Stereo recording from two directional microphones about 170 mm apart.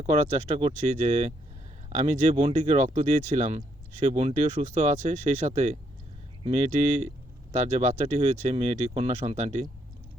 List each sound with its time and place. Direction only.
0.0 s speech: 40° right (ahead or behind)